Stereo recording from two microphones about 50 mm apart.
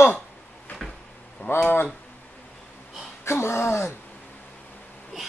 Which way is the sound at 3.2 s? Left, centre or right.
Left.